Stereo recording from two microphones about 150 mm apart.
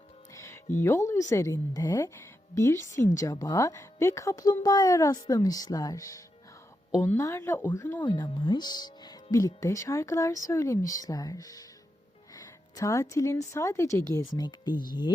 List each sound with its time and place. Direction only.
0.3 s music: 20° left (ahead or behind)
0.8 s a woman's voice: 20° left (ahead or behind)